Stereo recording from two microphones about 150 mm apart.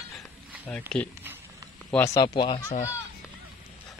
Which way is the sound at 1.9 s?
15° left (ahead or behind).